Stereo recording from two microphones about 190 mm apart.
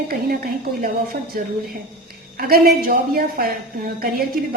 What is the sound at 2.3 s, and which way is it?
A woman's voice, 50° right (ahead or behind).